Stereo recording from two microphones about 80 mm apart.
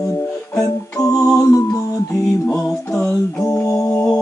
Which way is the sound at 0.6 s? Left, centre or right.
Left.